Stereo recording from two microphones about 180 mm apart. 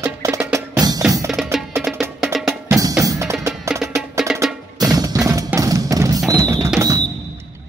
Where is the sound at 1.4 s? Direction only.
Centre (ahead or behind).